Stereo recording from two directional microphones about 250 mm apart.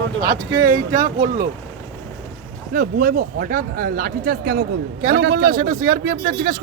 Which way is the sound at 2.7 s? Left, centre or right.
Right.